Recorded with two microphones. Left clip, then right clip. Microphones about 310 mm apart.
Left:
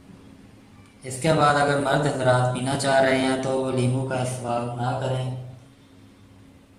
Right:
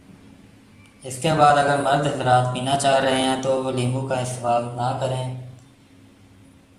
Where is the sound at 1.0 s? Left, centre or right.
Centre.